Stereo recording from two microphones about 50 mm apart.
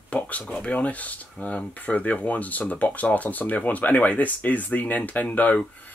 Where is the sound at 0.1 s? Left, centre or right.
Left.